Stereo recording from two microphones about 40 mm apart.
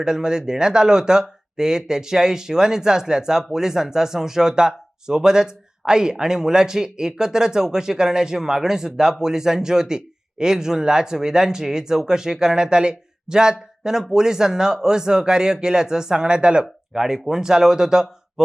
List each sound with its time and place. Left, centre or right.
0.0 s speech: centre